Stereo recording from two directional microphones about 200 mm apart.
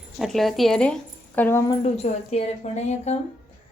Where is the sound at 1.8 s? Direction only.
35° left (ahead or behind).